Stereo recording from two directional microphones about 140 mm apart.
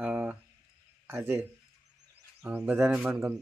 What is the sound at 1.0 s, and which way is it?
A man's voice, 15° right (ahead or behind).